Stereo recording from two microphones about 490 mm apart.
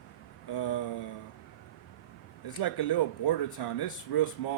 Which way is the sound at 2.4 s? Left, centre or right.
Left.